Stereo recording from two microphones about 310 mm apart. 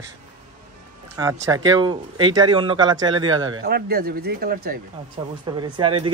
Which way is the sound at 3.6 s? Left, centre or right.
Right.